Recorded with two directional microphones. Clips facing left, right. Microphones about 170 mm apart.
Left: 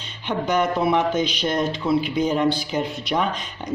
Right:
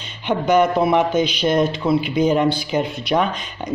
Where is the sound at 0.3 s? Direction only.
60° right (ahead or behind).